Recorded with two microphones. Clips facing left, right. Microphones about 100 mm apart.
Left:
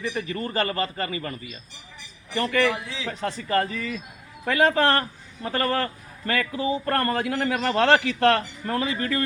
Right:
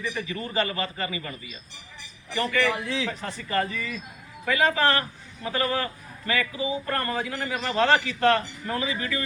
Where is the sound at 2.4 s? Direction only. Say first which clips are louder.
Left 2 dB; 45° left (ahead or behind).